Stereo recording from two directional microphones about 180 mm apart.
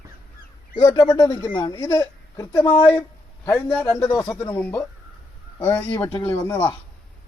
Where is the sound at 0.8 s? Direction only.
20° left (ahead or behind).